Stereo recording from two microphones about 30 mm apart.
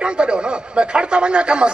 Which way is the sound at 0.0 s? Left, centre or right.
Right.